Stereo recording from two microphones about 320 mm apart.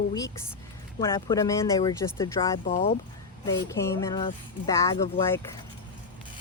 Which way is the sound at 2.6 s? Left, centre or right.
Left.